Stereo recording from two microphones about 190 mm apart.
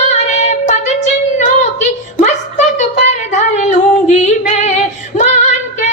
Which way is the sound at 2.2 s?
35° left (ahead or behind).